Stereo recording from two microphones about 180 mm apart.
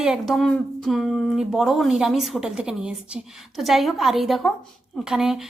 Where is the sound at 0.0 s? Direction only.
Centre (ahead or behind).